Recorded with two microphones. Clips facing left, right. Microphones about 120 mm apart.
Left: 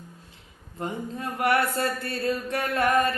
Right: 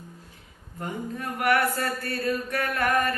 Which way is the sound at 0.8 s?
25° left (ahead or behind).